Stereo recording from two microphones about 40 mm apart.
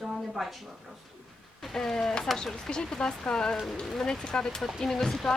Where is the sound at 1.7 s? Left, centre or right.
Centre.